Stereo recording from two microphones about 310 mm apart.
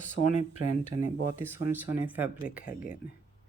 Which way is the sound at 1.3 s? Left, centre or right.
Centre.